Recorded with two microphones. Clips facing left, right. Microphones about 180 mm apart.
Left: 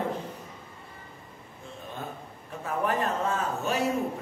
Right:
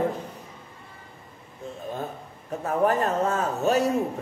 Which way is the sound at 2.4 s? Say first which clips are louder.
Right 6 dB; 40° right (ahead or behind).